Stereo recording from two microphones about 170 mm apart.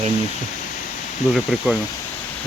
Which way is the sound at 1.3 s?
Centre (ahead or behind).